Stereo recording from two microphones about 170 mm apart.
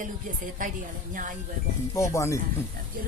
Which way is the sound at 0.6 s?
50° right (ahead or behind).